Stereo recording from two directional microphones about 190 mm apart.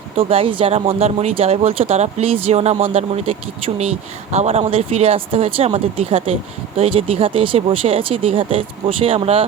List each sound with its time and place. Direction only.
0.2 s speech: 30° right (ahead or behind)